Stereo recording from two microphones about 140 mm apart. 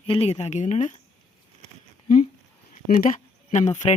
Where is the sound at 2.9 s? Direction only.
65° left (ahead or behind).